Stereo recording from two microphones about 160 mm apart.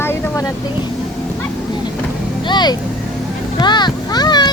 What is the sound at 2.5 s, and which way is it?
Vehicle, 25° left (ahead or behind).